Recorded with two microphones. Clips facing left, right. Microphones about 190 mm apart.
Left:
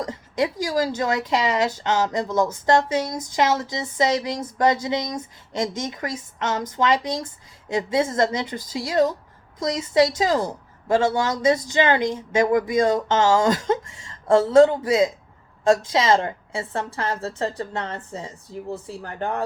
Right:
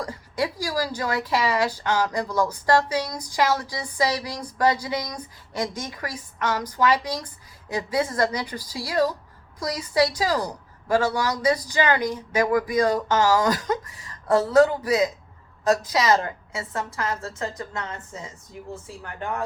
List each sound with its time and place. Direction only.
0.0 s a woman's voice: 20° left (ahead or behind)